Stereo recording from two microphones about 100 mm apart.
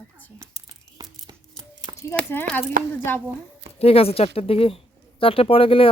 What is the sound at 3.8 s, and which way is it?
Speech, 75° left (ahead or behind).